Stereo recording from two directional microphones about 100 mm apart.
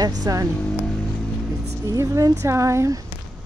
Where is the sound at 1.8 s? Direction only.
35° right (ahead or behind).